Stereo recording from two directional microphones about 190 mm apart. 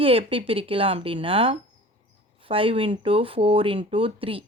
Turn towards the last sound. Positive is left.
turn(degrees=-30)  # may be behind; listen again after turning